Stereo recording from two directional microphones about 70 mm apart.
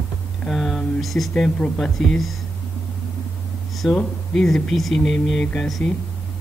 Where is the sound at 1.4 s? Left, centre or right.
Centre.